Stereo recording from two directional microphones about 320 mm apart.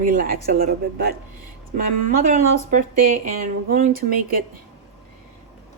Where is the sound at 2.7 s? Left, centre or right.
Right.